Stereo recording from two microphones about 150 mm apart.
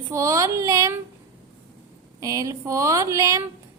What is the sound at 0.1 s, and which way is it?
Speech, 20° right (ahead or behind).